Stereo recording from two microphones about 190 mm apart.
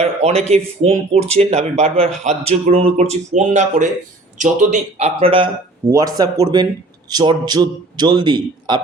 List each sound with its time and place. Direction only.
0.0 s speech: 35° right (ahead or behind)
5.9 s a man's voice: 20° right (ahead or behind)